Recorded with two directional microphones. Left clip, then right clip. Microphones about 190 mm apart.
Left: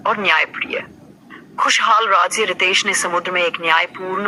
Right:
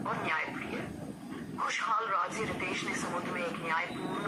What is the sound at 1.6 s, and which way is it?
A man's voice, 50° left (ahead or behind).